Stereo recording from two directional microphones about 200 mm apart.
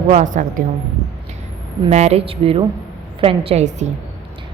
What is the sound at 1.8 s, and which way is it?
A woman's voice, 30° right (ahead or behind).